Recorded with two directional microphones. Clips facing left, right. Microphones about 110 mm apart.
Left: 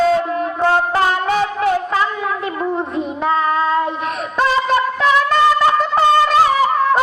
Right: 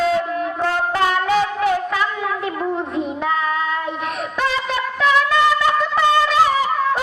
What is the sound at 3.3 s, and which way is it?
Child singing, 35° left (ahead or behind).